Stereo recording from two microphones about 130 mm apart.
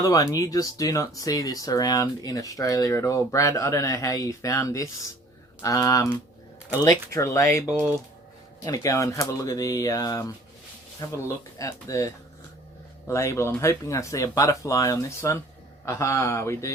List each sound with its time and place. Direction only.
0.0 s speech: 25° left (ahead or behind)
8.6 s speech: 25° left (ahead or behind)